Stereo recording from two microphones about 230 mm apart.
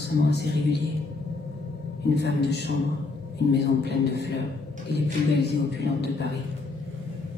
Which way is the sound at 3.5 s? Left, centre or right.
Left.